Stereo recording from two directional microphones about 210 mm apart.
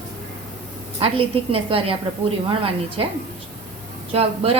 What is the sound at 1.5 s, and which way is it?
Speech, 25° right (ahead or behind).